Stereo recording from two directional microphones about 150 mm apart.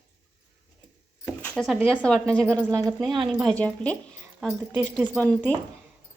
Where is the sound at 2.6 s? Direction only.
20° right (ahead or behind).